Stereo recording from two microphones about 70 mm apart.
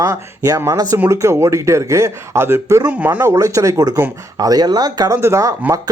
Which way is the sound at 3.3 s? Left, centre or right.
Right.